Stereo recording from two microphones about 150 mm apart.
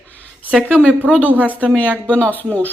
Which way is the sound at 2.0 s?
10° left (ahead or behind).